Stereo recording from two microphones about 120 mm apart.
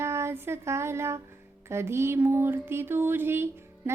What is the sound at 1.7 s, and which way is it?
Female singing, 20° right (ahead or behind).